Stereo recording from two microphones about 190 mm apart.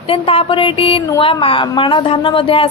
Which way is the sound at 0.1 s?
30° left (ahead or behind).